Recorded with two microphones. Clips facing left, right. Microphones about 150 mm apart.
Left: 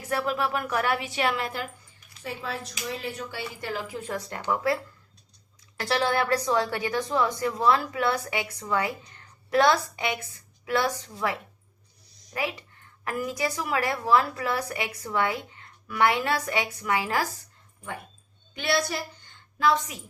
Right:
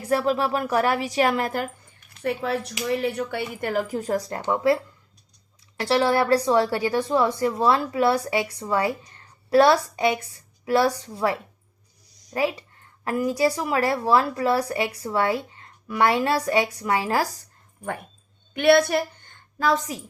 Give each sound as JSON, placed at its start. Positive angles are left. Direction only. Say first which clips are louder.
{"t": 0.1, "sound": "a woman's voice", "louder": "right 5 dB", "side_deg": -30}
{"t": 2.2, "sound": "a woman's voice", "louder": "right 9 dB", "side_deg": -65}
{"t": 5.8, "sound": "a woman's voice", "louder": "right 5 dB", "side_deg": -25}
{"t": 12.3, "sound": "a woman's voice", "louder": "right 7 dB", "side_deg": -35}
{"t": 18.5, "sound": "a woman's voice", "louder": "right 10 dB", "side_deg": -60}